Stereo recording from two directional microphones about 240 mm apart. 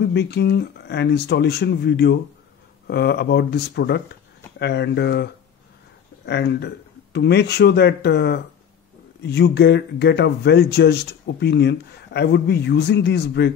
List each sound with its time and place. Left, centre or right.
0.0 s speech: left